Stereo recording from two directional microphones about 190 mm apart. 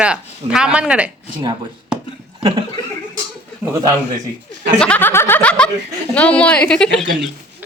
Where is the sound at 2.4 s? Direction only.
25° right (ahead or behind).